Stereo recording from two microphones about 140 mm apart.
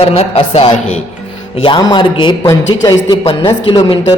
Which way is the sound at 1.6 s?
35° left (ahead or behind).